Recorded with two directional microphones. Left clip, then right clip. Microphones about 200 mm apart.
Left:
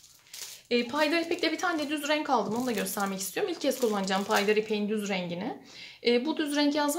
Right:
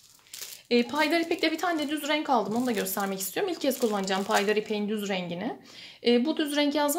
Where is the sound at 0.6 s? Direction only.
40° right (ahead or behind).